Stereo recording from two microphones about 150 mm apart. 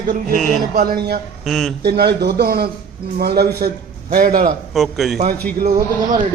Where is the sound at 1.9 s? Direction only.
90° right; by 4.5 s 70° right (ahead or behind).